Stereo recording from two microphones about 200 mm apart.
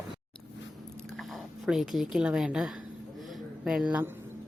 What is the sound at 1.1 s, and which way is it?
Speech, centre (ahead or behind).